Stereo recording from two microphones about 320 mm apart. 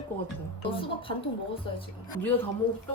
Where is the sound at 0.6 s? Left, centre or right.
Centre.